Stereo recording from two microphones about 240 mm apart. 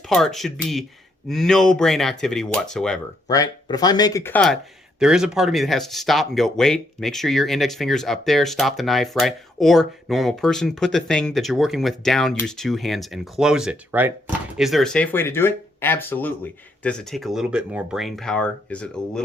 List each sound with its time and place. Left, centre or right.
0.1 s speech: centre
3.2 s speech: centre